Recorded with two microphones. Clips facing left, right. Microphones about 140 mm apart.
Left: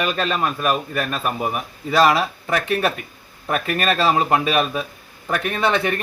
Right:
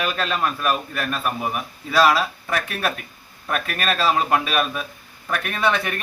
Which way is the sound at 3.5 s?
35° left (ahead or behind).